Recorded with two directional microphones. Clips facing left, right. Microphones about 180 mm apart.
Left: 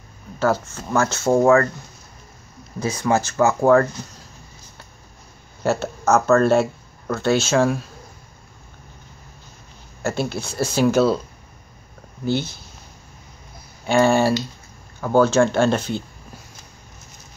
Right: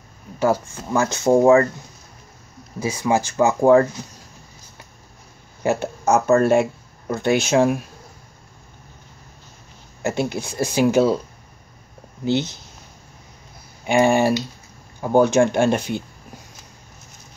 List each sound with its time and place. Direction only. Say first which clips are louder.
0.4 s speech: right 1 dB; 15° right (ahead or behind)
2.8 s speech: even; 10° right (ahead or behind)
5.6 s speech: even; 15° right (ahead or behind)
10.0 s speech: right 1 dB; 15° right (ahead or behind)
12.3 s speech: right 2 dB; 20° right (ahead or behind)
13.8 s speech: even; 15° right (ahead or behind)